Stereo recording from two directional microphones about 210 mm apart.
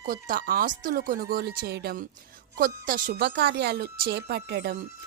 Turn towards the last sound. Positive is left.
turn(degrees=-50)  # may be behind; listen again after turning